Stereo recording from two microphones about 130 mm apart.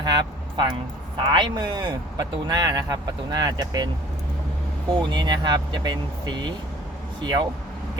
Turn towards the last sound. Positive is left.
turn(degrees=-35)  # may be behind; listen again after turning